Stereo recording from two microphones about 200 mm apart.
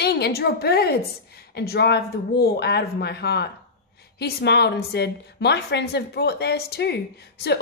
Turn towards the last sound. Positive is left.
turn(degrees=55)  # may be behind; listen again after turning